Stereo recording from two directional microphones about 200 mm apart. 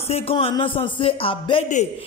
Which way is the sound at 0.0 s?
30° left (ahead or behind).